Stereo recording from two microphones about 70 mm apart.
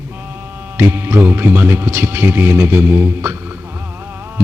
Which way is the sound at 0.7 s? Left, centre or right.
Right.